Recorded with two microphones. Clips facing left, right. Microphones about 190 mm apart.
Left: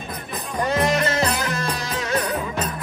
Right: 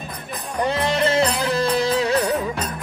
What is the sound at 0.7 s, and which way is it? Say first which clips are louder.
Music: even; 30° right (ahead or behind).